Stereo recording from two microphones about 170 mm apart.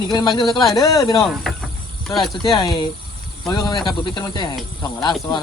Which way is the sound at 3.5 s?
20° left (ahead or behind).